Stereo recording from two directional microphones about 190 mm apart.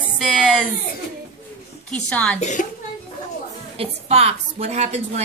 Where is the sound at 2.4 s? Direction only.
40° left (ahead or behind).